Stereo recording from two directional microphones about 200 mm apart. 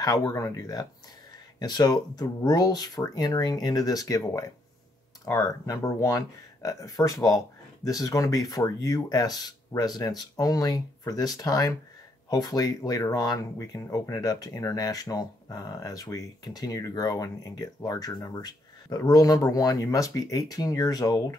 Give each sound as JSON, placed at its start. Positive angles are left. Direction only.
{"t": 0.0, "sound": "speech", "side_deg": 20}